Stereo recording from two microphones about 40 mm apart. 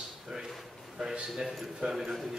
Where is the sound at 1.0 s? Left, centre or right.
Centre.